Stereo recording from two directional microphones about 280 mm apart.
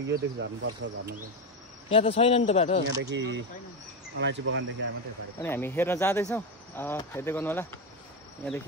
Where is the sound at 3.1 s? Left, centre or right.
Right.